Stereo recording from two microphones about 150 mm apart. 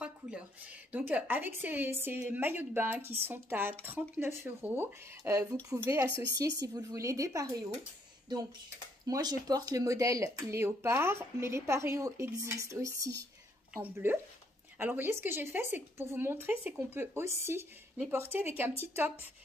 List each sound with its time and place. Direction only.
0.9 s speech: 10° right (ahead or behind)
9.0 s speech: 25° right (ahead or behind)